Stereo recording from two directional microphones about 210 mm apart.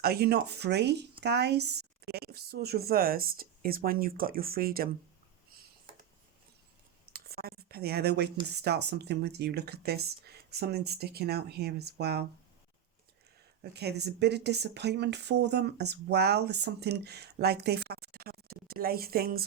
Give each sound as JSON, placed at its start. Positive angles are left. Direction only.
{"t": 0.0, "sound": "speech", "side_deg": -50}
{"t": 7.1, "sound": "a sound", "side_deg": -45}
{"t": 8.4, "sound": "speech", "side_deg": -50}
{"t": 13.6, "sound": "speech", "side_deg": -50}